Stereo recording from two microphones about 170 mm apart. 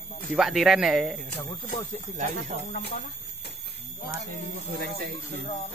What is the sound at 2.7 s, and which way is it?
Speech, 70° left (ahead or behind).